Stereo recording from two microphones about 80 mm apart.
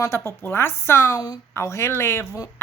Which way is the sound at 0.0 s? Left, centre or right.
Left.